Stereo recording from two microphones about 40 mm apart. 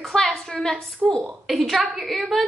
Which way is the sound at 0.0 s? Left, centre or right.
Centre.